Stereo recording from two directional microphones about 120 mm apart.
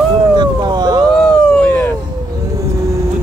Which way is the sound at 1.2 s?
10° left (ahead or behind).